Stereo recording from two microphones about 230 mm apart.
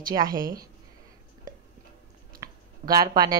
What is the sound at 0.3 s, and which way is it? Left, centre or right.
Speech, right.